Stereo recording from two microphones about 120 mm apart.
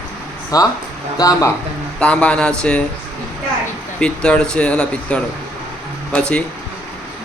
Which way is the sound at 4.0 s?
10° left (ahead or behind).